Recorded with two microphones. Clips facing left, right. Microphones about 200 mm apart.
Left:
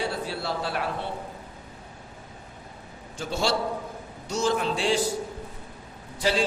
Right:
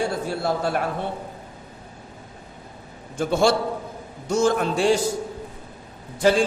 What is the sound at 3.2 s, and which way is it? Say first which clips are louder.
A man's voice: right 7 dB; 55° right (ahead or behind).